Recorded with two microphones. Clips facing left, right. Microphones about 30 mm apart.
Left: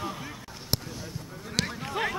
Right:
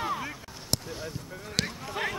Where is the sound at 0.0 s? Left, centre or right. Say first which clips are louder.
Right 4 dB; centre.